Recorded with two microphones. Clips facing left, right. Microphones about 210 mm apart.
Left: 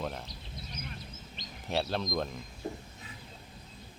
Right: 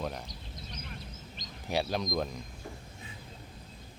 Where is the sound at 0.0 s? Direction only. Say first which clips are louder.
Even; centre (ahead or behind).